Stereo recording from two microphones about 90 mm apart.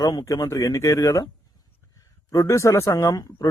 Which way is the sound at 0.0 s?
45° left (ahead or behind).